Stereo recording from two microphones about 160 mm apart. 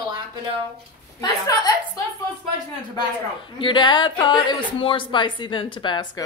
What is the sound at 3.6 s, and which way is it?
A woman's voice, 30° left (ahead or behind).